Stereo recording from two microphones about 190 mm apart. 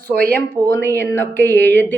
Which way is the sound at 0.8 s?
10° left (ahead or behind).